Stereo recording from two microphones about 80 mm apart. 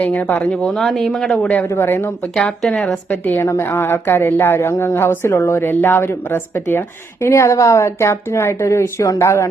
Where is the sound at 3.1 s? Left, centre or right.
Left.